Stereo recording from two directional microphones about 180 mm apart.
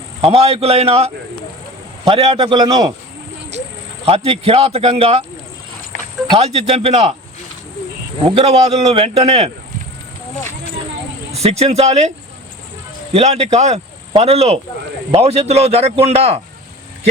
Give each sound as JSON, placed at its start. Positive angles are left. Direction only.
{"t": 0.2, "sound": "a man's voice", "side_deg": -35}
{"t": 4.0, "sound": "speech", "side_deg": -35}
{"t": 5.9, "sound": "cricket", "side_deg": 45}
{"t": 6.3, "sound": "speech", "side_deg": -35}
{"t": 8.4, "sound": "speech", "side_deg": -35}
{"t": 11.3, "sound": "speech", "side_deg": -35}
{"t": 13.1, "sound": "speech", "side_deg": -35}